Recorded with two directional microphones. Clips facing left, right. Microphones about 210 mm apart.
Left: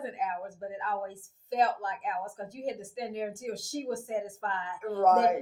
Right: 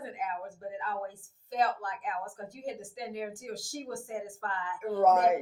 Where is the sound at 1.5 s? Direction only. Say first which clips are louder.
Left 2 dB; 25° left (ahead or behind).